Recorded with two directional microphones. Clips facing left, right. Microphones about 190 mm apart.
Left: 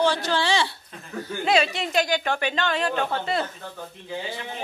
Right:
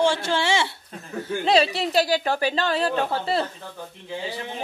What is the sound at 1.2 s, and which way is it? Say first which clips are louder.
Speech: right 2 dB; 35° right (ahead or behind).